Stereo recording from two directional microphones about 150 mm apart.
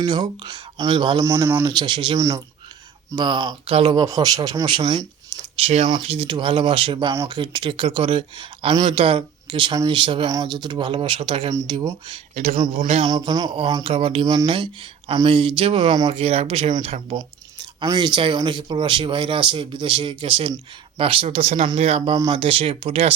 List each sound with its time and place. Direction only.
0.0 s speech: 30° right (ahead or behind)
1.2 s speech: 20° right (ahead or behind)
1.6 s speech: 30° right (ahead or behind)
7.1 s speech: 25° right (ahead or behind)
12.3 s speech: 50° right (ahead or behind)
12.6 s speech: 30° right (ahead or behind)
17.2 s speech: 25° right (ahead or behind)